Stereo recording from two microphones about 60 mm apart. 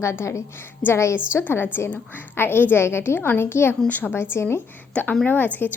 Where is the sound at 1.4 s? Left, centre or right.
Left.